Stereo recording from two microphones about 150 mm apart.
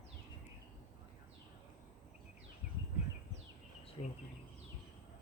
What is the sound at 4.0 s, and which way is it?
Speech, 35° left (ahead or behind).